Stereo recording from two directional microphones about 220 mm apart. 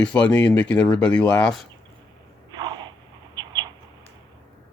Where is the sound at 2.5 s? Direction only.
20° right (ahead or behind).